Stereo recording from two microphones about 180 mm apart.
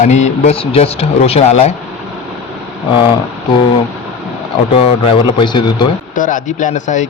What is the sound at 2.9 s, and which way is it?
Speech, 25° left (ahead or behind).